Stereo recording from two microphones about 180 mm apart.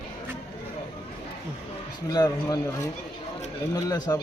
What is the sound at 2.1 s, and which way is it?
A man's voice, 20° left (ahead or behind).